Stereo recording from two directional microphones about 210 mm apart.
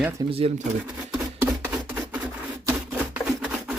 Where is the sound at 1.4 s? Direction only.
10° right (ahead or behind).